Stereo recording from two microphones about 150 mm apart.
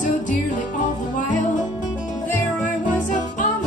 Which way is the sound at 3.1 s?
55° left (ahead or behind).